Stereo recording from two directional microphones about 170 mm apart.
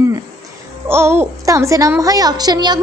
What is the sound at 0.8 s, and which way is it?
A woman's voice, 15° right (ahead or behind).